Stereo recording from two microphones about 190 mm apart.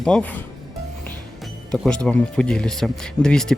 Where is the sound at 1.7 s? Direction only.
5° left (ahead or behind).